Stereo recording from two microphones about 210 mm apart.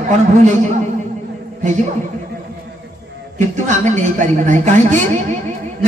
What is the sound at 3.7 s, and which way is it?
Speech, 35° right (ahead or behind).